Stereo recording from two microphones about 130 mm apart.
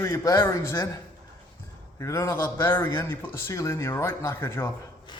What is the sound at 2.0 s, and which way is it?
Speech, 25° left (ahead or behind).